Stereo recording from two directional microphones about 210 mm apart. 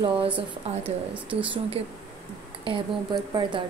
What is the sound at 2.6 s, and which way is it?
Speech, 25° right (ahead or behind).